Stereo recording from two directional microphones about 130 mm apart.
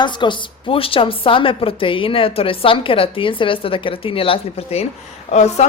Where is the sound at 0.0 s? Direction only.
35° left (ahead or behind).